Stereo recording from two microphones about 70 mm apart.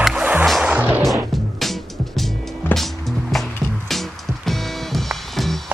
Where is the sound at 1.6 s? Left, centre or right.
Centre.